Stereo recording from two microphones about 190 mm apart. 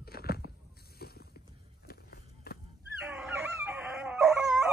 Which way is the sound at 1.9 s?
50° left (ahead or behind).